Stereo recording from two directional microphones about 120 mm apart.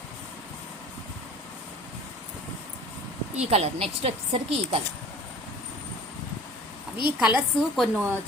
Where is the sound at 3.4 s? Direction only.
65° right (ahead or behind).